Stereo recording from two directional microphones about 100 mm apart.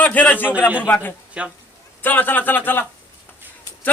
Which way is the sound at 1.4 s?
10° right (ahead or behind).